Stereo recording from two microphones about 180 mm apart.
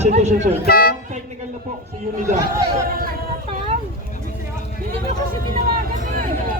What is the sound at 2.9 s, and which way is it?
Speech, 55° right (ahead or behind).